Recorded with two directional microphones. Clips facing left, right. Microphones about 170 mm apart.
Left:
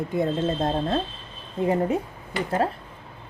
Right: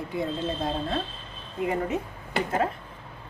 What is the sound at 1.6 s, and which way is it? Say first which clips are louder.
Speech: left 5 dB; 30° left (ahead or behind).